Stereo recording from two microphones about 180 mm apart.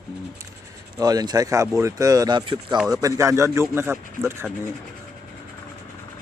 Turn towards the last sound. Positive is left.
turn(degrees=-15)  # may be behind; listen again after turning